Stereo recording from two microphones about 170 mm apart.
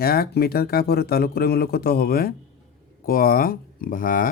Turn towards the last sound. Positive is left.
turn(degrees=50)  # may be behind; listen again after turning